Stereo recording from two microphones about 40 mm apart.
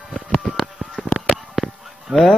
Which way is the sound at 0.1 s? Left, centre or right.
Centre.